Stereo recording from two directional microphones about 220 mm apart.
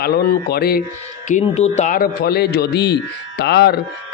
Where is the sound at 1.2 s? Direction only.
30° left (ahead or behind).